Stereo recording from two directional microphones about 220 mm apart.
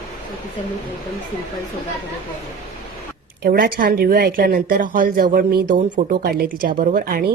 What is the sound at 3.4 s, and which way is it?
A woman's voice, 40° right (ahead or behind).